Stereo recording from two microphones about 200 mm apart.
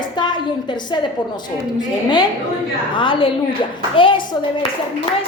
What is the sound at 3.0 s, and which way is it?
A woman's voice, 25° left (ahead or behind).